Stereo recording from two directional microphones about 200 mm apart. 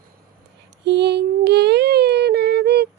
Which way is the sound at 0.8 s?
55° right (ahead or behind).